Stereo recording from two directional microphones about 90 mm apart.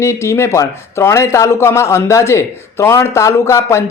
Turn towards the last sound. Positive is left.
turn(degrees=30)  # may be behind; listen again after turning